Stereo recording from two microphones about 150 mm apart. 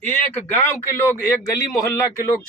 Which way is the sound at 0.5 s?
15° left (ahead or behind).